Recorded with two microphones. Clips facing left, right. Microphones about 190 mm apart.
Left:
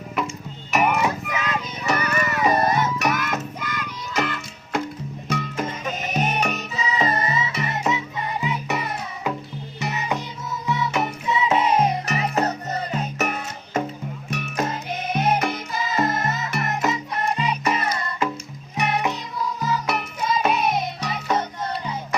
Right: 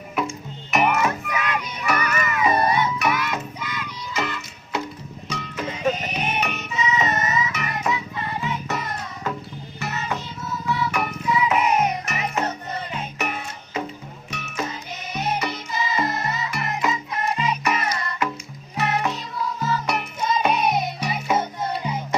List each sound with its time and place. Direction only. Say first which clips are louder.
0.7 s music: even; centre (ahead or behind)
1.0 s music: even; 20° left (ahead or behind); by 13.8 s 45° left (ahead or behind)
14.3 s music: left 4 dB; 55° left (ahead or behind)
17.3 s music: even; 30° left (ahead or behind)
18.8 s music: even; 15° left (ahead or behind)
19.9 s music: even; centre (ahead or behind)